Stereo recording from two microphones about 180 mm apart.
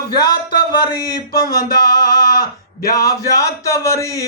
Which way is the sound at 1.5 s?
55° left (ahead or behind).